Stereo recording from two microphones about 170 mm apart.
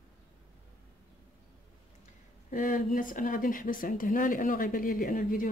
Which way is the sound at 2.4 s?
50° left (ahead or behind).